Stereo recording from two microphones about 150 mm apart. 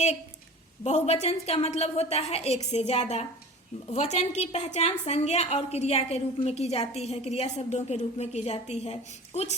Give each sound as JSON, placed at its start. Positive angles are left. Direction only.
{"t": 0.9, "sound": "a woman's voice", "side_deg": 45}